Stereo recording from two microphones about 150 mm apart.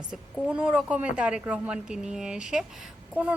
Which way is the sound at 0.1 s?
5° right (ahead or behind).